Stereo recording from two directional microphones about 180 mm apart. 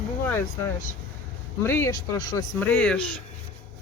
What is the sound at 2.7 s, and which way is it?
Speech, 10° left (ahead or behind).